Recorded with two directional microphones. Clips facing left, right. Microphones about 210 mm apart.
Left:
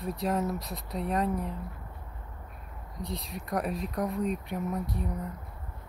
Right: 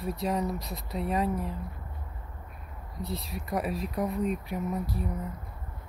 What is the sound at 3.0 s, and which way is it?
Speech, centre (ahead or behind).